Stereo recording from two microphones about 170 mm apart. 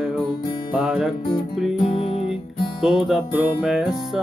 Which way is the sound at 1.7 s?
35° left (ahead or behind).